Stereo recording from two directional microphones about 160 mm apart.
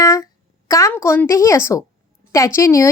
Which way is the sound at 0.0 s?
20° left (ahead or behind).